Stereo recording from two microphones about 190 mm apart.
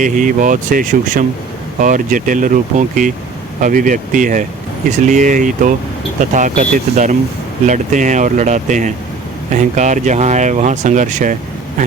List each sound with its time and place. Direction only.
0.0 s speech: 45° right (ahead or behind)